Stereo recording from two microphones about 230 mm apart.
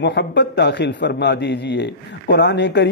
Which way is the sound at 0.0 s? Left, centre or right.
Left.